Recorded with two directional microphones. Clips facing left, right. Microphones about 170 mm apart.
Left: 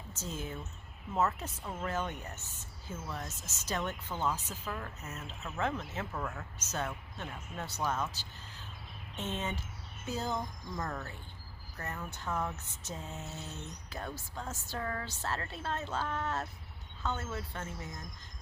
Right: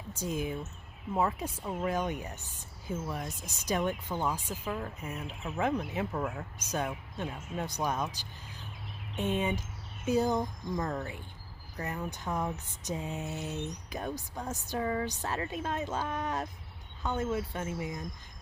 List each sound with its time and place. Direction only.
0.1 s speech: 15° right (ahead or behind)